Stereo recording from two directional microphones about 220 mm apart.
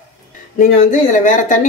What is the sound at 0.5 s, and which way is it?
Speech, 35° left (ahead or behind).